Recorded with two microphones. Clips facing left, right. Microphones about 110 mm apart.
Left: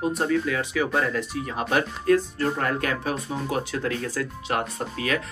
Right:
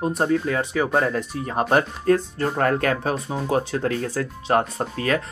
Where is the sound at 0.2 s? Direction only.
40° right (ahead or behind).